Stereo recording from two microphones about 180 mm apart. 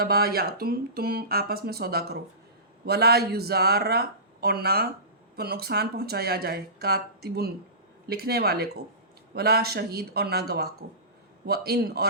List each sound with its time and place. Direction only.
0.0 s speech: 60° right (ahead or behind)